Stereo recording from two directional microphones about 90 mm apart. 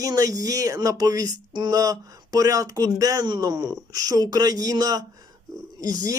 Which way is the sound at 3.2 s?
50° right (ahead or behind).